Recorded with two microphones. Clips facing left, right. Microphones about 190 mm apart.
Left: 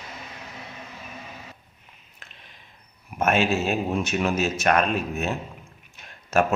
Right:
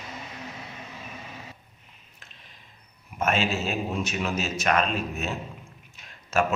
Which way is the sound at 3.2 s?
55° left (ahead or behind).